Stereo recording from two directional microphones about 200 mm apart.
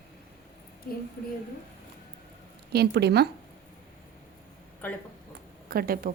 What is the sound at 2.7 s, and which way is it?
Speech, 55° right (ahead or behind).